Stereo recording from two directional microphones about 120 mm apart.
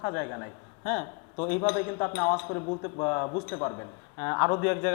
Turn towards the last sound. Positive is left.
turn(degrees=20)  # may be behind; listen again after turning